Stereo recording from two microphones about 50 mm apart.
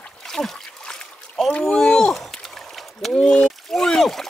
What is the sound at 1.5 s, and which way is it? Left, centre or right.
Rowboat, left.